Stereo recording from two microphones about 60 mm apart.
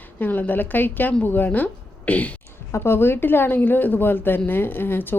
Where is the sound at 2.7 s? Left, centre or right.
Left.